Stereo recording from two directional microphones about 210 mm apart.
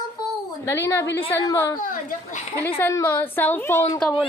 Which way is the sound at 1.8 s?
35° left (ahead or behind).